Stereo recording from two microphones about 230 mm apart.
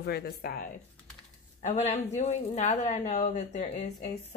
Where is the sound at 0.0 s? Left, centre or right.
Left.